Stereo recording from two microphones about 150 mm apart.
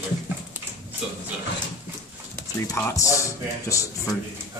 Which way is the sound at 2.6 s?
20° left (ahead or behind).